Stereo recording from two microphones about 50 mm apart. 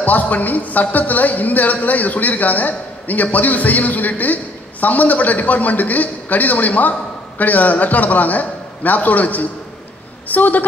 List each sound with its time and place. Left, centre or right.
0.0 s a woman's voice: left